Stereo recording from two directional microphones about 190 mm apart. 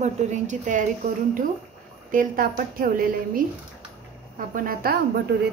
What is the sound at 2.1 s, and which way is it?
A woman's voice, 45° right (ahead or behind).